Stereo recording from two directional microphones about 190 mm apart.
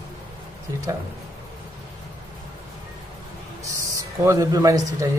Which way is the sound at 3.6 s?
15° right (ahead or behind).